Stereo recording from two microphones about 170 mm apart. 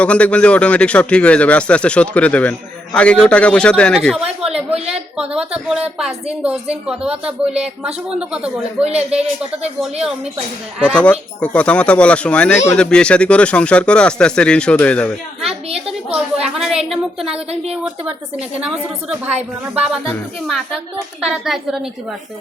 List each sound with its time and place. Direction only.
0.0 s a man's voice: 5° left (ahead or behind)
7.5 s speech: 40° right (ahead or behind)
9.8 s a man's voice: 5° right (ahead or behind)
19.7 s speech: 5° right (ahead or behind)
21.2 s speech: 5° right (ahead or behind)